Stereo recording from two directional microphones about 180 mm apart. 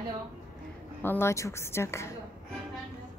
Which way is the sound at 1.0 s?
10° left (ahead or behind).